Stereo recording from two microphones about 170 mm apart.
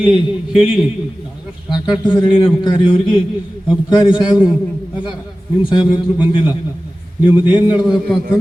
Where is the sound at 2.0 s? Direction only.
30° left (ahead or behind).